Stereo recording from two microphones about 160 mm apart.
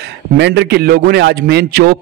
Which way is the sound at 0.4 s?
90° right.